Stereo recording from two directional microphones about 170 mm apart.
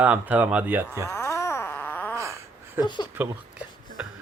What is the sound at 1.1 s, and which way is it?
Wail, 15° left (ahead or behind).